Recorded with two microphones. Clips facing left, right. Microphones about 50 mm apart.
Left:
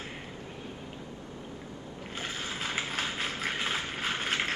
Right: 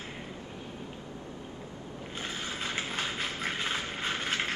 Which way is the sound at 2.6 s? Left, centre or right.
Centre.